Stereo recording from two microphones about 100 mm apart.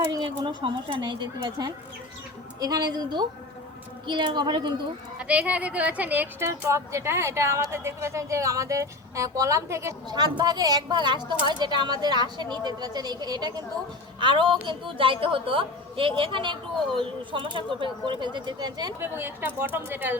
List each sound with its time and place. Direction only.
0.1 s speech: 55° right (ahead or behind)
5.3 s speech: 15° right (ahead or behind)
6.5 s a woman's voice: 30° right (ahead or behind)
10.1 s speech: 45° right (ahead or behind)
14.2 s a woman's voice: 55° right (ahead or behind)
18.9 s a woman's voice: 25° right (ahead or behind)